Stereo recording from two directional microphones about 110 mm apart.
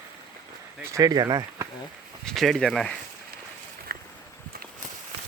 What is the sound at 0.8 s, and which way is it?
Speech, 30° right (ahead or behind).